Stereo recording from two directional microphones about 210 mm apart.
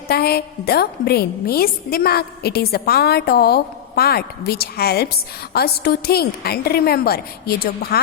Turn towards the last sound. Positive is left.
turn(degrees=50)  # may be behind; listen again after turning